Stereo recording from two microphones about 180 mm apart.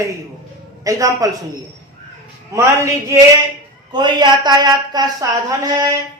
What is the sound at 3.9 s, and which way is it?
A woman's voice, 25° right (ahead or behind).